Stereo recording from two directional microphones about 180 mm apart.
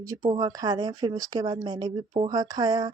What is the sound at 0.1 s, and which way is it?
Speech, 20° right (ahead or behind).